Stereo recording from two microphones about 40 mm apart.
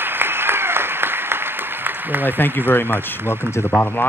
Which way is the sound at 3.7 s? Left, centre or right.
Left.